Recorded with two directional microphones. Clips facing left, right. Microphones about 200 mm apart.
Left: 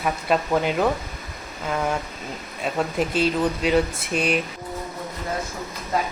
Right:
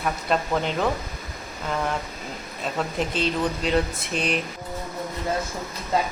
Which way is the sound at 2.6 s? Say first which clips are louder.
Left 3 dB; 5° left (ahead or behind).